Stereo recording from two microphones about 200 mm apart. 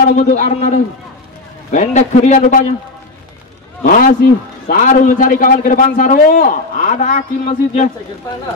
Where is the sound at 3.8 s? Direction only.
40° left (ahead or behind).